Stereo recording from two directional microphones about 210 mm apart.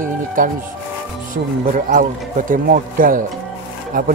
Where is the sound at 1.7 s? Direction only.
40° right (ahead or behind).